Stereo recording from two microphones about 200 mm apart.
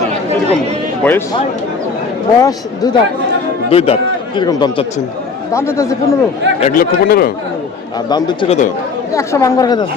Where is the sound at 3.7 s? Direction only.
30° left (ahead or behind).